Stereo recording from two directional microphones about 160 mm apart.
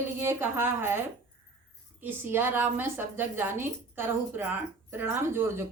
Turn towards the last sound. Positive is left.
turn(degrees=-15)  # may be behind; listen again after turning